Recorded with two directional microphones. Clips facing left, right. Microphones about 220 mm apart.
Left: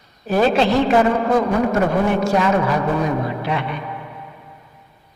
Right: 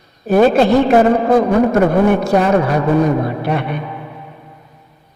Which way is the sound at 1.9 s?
60° right (ahead or behind).